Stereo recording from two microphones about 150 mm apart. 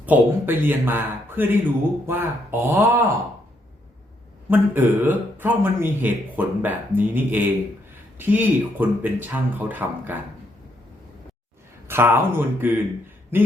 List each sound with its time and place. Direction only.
0.0 s speech: 10° right (ahead or behind)
4.4 s speech: 15° right (ahead or behind)
11.9 s speech: 15° right (ahead or behind)